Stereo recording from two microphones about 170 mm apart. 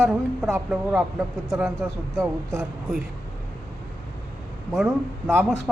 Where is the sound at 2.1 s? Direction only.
20° right (ahead or behind).